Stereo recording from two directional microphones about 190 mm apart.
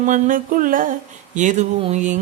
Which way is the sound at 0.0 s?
45° right (ahead or behind).